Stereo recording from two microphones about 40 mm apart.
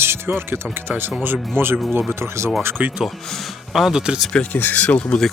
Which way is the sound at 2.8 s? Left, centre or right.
Right.